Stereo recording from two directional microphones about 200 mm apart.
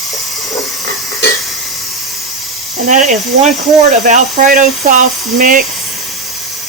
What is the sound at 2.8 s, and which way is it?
Speech, 35° right (ahead or behind).